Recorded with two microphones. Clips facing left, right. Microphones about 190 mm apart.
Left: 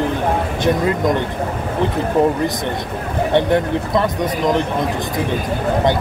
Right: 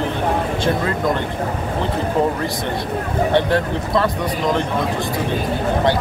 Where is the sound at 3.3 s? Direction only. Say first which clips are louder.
Left 4 dB; 20° left (ahead or behind).